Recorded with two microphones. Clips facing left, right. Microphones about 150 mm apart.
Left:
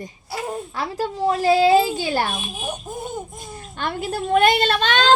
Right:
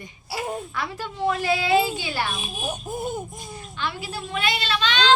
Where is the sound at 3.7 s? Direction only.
50° left (ahead or behind).